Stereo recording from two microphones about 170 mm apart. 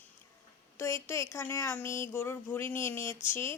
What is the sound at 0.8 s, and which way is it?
Speech, 15° left (ahead or behind).